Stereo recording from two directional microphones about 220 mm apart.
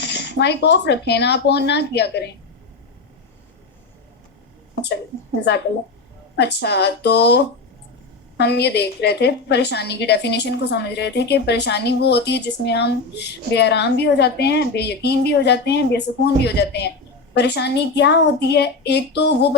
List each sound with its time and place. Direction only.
0.0 s a woman's voice: 50° left (ahead or behind)
4.7 s a sound: 50° left (ahead or behind)
6.3 s a woman's voice: 50° left (ahead or behind)